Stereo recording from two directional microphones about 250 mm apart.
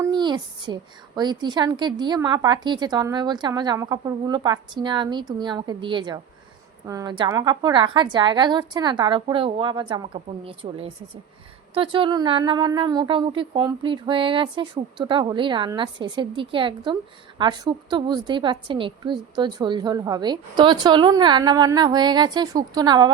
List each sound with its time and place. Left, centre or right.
0.0 s a woman's voice: centre